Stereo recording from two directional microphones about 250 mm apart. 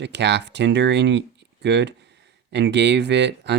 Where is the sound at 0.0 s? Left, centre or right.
Right.